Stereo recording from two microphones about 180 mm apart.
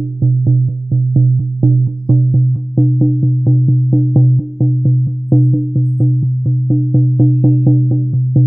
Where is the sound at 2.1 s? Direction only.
Centre (ahead or behind).